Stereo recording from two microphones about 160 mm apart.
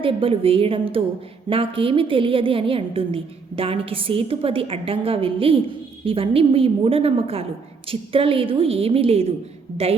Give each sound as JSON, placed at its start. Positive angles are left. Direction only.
{"t": 0.0, "sound": "a woman's voice", "side_deg": -35}